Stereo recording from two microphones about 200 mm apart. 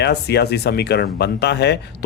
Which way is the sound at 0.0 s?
55° left (ahead or behind).